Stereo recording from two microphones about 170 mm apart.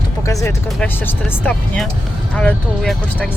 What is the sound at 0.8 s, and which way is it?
Speech, 5° left (ahead or behind).